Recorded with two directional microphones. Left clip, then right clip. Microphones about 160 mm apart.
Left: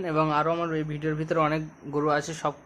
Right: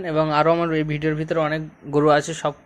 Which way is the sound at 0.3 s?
25° right (ahead or behind).